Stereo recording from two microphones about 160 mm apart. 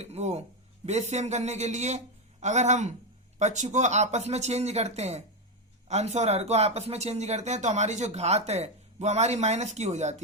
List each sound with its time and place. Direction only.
0.0 s speech: 45° right (ahead or behind)